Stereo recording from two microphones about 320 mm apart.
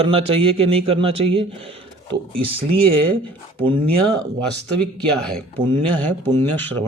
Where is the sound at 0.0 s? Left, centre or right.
Centre.